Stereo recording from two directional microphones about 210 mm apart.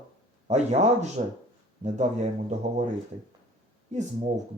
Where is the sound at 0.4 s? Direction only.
35° right (ahead or behind).